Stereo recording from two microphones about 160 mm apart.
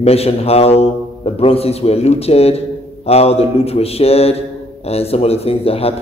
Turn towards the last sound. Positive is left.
turn(degrees=40)  # may be behind; listen again after turning